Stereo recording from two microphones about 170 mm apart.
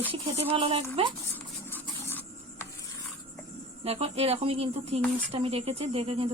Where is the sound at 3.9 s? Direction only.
35° right (ahead or behind).